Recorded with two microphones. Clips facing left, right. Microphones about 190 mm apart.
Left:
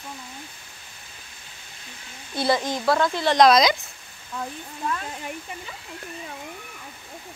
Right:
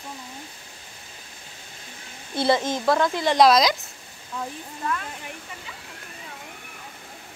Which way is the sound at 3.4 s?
Centre (ahead or behind).